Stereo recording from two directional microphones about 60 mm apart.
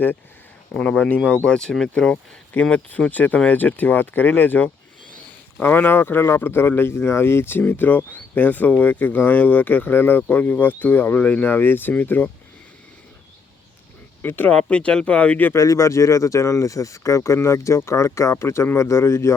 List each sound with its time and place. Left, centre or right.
0.8 s speech: centre
2.6 s speech: centre; by 7.6 s left
7.7 s speech: left
14.2 s speech: left
14.5 s speech: centre
15.5 s speech: left